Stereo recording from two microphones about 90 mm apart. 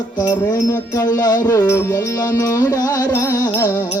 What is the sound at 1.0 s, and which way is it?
Music, 45° left (ahead or behind).